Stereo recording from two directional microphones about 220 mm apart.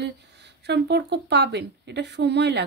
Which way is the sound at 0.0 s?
50° right (ahead or behind).